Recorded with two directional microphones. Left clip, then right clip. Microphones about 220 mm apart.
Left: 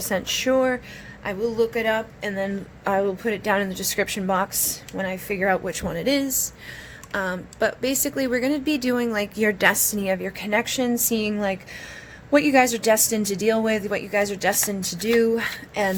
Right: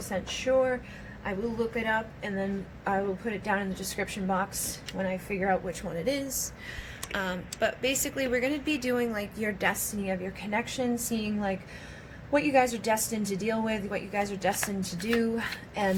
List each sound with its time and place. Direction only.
0.1 s speech: 45° left (ahead or behind)
7.1 s speech: 40° left (ahead or behind)